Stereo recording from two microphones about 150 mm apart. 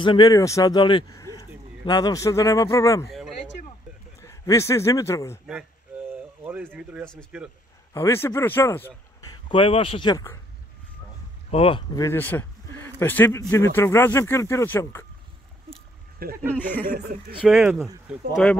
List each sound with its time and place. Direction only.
0.0 s speech: 30° left (ahead or behind)
4.2 s a man's voice: 20° left (ahead or behind)
5.5 s a sound: 10° right (ahead or behind)
7.3 s speech: 5° right (ahead or behind)
7.9 s speech: 15° left (ahead or behind)
9.5 s a man's voice: 35° left (ahead or behind)
10.1 s speech: 20° left (ahead or behind)
11.5 s a man's voice: 40° left (ahead or behind)
11.9 s a man's voice: 20° left (ahead or behind)
16.2 s speech: 80° right
16.5 s speech: 10° left (ahead or behind)
17.4 s speech: 5° right (ahead or behind)